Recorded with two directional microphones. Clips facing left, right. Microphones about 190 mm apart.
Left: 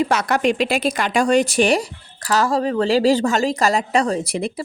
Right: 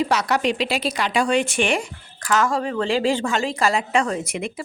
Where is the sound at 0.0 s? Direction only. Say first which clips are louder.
Left 2 dB; 50° left (ahead or behind).